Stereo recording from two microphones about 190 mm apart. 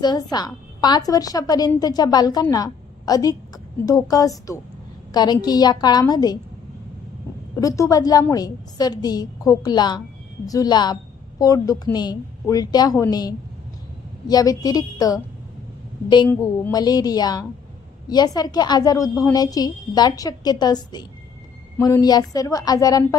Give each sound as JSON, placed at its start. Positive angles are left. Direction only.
{"t": 0.0, "sound": "a woman's voice", "side_deg": 20}
{"t": 7.5, "sound": "a woman's voice", "side_deg": 15}